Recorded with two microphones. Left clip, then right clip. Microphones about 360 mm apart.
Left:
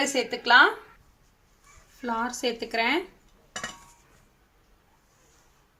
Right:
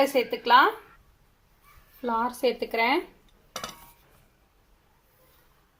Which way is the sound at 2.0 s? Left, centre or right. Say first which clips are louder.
Right 3 dB; centre.